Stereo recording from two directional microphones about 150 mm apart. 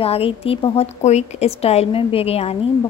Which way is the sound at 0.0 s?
40° left (ahead or behind).